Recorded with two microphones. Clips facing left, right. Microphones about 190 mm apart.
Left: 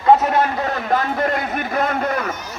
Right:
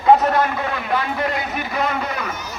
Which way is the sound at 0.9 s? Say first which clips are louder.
Left 3 dB; 45° left (ahead or behind).